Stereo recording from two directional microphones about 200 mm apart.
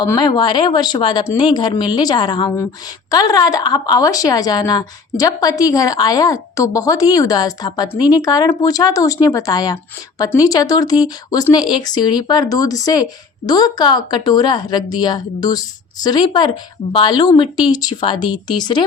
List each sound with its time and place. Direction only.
0.0 s speech: 20° left (ahead or behind)